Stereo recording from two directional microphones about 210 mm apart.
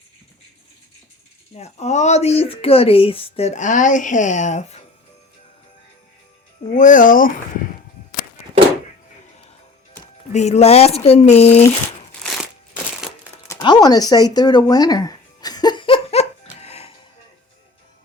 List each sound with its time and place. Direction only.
1.5 s speech: 30° left (ahead or behind)
6.7 s speech: 35° left (ahead or behind)
10.3 s speech: 30° left (ahead or behind)
13.5 s a sound: 20° left (ahead or behind)